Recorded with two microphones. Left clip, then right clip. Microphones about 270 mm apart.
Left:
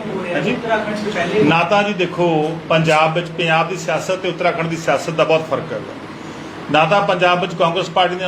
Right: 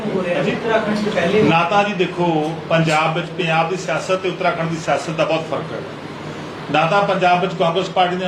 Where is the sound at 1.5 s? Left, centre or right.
Left.